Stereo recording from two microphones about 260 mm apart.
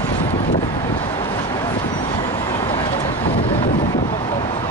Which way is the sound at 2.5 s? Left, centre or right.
Left.